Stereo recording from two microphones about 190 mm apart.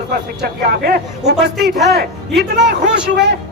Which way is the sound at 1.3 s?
Centre (ahead or behind).